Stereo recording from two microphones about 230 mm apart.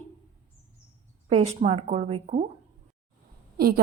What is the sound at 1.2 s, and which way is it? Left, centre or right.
A woman's voice, right.